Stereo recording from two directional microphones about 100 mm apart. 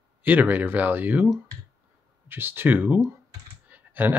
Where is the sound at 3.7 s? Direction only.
20° right (ahead or behind).